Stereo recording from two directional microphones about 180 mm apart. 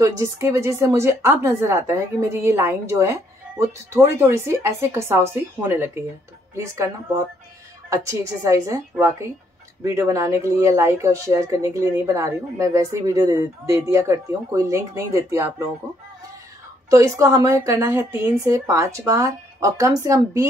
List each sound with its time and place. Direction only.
0.0 s a woman's voice: 15° right (ahead or behind)
7.9 s a woman's voice: 15° right (ahead or behind)
16.9 s a woman's voice: 15° right (ahead or behind)